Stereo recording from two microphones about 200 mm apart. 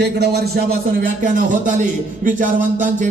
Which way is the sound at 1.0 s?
40° right (ahead or behind).